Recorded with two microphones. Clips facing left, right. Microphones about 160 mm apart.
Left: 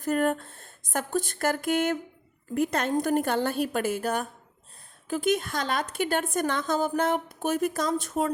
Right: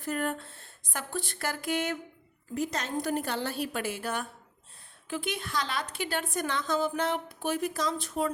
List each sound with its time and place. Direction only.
0.0 s a woman's voice: 45° left (ahead or behind)